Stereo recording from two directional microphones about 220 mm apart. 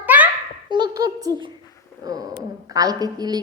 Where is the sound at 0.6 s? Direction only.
20° right (ahead or behind).